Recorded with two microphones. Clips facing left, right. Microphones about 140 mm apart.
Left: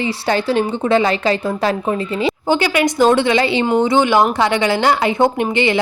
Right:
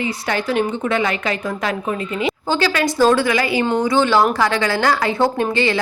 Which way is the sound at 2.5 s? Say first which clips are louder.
Left 3 dB; 20° left (ahead or behind).